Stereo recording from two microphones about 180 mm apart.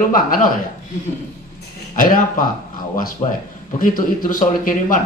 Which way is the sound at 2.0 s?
50° left (ahead or behind).